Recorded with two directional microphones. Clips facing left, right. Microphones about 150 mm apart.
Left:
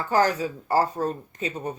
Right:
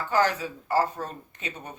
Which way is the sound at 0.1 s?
40° left (ahead or behind).